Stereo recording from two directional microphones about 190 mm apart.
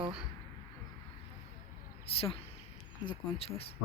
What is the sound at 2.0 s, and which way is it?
Speech, 30° left (ahead or behind).